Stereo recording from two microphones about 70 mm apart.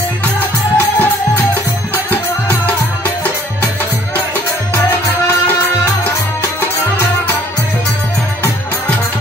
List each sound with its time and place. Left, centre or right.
0.7 s music: left